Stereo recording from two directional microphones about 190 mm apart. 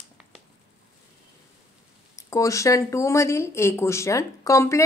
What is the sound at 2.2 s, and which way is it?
Speech, 15° left (ahead or behind).